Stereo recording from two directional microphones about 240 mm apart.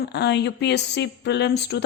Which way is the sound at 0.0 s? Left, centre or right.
Left.